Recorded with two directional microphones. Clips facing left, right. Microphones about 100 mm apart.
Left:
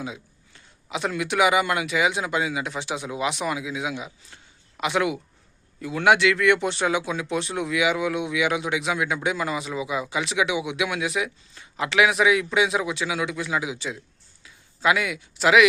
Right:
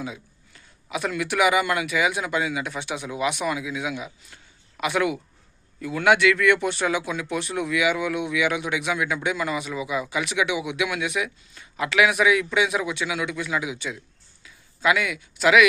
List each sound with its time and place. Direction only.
0.0 s speech: 25° left (ahead or behind)